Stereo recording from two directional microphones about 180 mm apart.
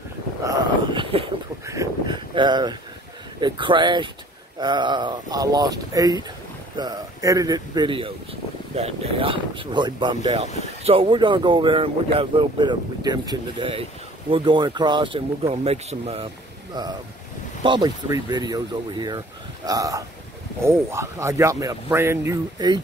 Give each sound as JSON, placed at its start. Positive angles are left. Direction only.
{"t": 0.9, "sound": "a sound", "side_deg": -30}
{"t": 1.7, "sound": "speech", "side_deg": -20}
{"t": 10.2, "sound": "speech", "side_deg": -35}
{"t": 17.6, "sound": "speech", "side_deg": -25}